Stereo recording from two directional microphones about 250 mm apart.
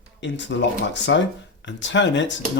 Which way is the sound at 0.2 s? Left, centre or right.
Left.